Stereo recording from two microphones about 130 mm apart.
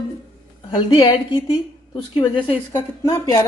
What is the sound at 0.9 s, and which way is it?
A woman's voice, 35° left (ahead or behind).